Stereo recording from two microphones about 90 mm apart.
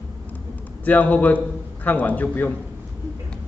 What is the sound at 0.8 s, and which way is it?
A man's voice, 20° left (ahead or behind).